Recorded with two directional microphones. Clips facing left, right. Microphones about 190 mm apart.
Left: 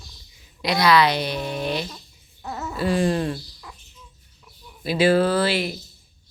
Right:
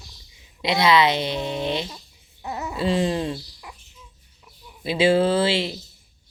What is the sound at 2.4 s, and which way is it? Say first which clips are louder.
Baby cry: even; 15° right (ahead or behind).